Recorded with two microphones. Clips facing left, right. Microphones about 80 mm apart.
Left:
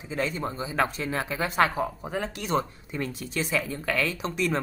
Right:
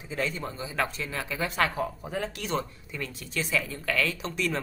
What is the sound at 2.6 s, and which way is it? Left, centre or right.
A woman's voice, left.